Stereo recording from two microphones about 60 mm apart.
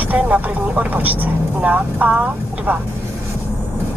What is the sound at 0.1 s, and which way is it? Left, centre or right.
Speech, right.